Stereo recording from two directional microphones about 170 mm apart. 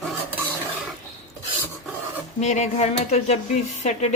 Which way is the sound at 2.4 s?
45° left (ahead or behind).